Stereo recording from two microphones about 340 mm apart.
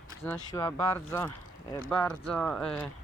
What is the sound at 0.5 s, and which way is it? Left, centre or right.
Speech, centre.